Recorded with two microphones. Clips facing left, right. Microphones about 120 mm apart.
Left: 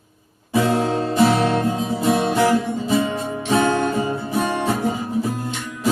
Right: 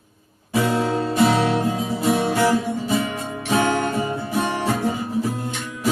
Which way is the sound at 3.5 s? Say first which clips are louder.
Left 2 dB; 15° right (ahead or behind).